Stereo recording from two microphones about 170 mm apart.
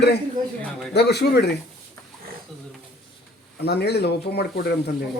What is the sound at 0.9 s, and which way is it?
Speech, 75° left (ahead or behind).